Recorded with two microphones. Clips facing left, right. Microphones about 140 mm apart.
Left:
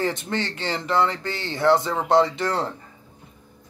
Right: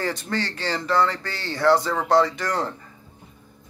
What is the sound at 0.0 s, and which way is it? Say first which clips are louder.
Speech: left 1 dB; 20° left (ahead or behind).